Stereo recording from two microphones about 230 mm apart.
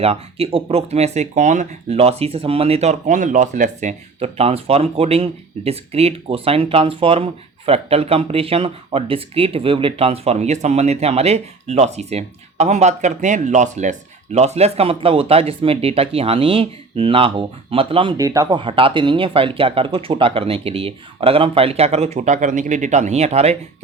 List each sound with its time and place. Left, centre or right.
0.0 s speech: right